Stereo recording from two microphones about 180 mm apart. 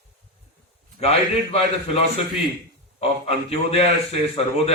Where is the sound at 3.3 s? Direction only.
35° left (ahead or behind).